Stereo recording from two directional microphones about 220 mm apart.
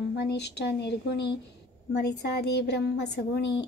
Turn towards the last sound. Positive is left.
turn(degrees=50)  # may be behind; listen again after turning